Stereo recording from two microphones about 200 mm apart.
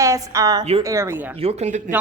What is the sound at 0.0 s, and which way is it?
A woman's voice, 15° right (ahead or behind).